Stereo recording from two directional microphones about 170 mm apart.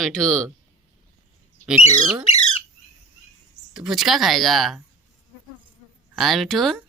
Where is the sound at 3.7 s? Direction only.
Centre (ahead or behind).